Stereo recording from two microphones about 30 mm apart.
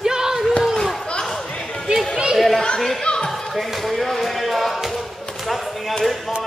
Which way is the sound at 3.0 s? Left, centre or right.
Left.